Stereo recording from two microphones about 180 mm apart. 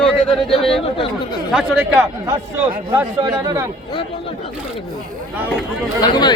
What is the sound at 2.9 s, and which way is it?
Speech, 15° right (ahead or behind).